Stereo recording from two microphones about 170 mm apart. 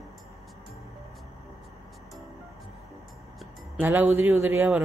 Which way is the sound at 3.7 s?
10° right (ahead or behind).